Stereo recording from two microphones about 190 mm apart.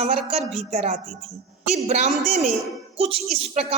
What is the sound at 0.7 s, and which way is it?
A woman's voice, 35° right (ahead or behind).